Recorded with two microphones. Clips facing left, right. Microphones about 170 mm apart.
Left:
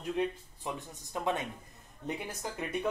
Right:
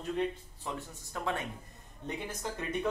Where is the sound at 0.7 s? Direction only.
20° left (ahead or behind).